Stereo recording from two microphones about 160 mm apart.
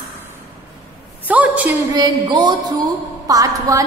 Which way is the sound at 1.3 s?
10° right (ahead or behind).